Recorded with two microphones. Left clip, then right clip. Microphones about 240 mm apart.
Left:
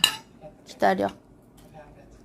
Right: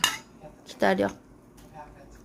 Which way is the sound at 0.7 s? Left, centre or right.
Centre.